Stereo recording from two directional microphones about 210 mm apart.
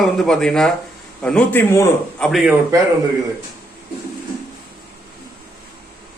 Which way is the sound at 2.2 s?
Centre (ahead or behind).